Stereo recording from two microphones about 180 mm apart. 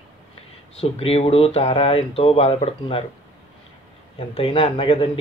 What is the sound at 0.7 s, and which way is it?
Speech, 35° left (ahead or behind).